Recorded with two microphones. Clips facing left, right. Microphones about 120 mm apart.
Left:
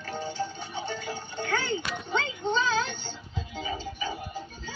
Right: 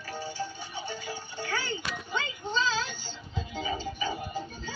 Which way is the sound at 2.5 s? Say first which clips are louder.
Left 4 dB; 60° left (ahead or behind).